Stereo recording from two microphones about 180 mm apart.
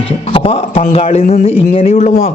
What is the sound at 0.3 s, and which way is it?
A man's voice, 30° left (ahead or behind).